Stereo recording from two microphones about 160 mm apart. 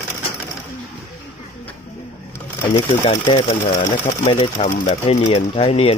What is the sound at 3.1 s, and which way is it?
Speech, 35° left (ahead or behind).